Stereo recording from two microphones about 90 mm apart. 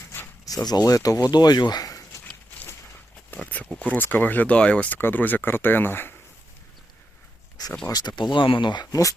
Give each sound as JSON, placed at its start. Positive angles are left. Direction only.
{"t": 0.4, "sound": "speech", "side_deg": 45}
{"t": 3.3, "sound": "speech", "side_deg": 15}
{"t": 7.9, "sound": "speech", "side_deg": 50}